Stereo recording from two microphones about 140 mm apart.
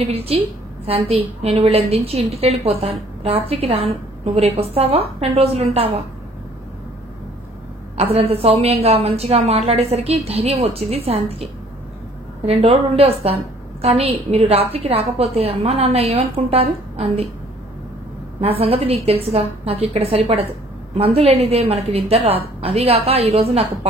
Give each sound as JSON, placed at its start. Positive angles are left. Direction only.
{"t": 0.0, "sound": "a woman's voice", "side_deg": -45}
{"t": 8.0, "sound": "a woman's voice", "side_deg": -45}
{"t": 12.4, "sound": "a woman's voice", "side_deg": -45}
{"t": 18.6, "sound": "a woman's voice", "side_deg": -45}